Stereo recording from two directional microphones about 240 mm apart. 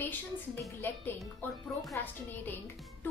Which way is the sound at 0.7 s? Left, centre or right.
Centre.